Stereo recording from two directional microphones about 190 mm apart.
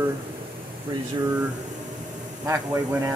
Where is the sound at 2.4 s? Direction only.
15° right (ahead or behind).